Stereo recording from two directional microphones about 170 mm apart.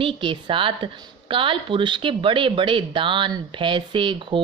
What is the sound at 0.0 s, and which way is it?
A woman's voice, 30° right (ahead or behind).